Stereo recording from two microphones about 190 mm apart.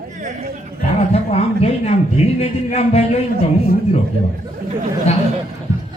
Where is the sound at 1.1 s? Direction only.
35° left (ahead or behind).